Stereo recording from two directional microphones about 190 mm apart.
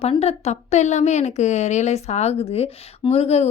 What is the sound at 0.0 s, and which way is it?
A woman's voice, 35° left (ahead or behind).